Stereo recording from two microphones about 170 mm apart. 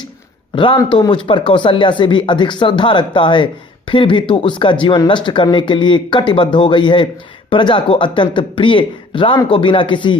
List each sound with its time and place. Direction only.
0.5 s speech: 30° left (ahead or behind)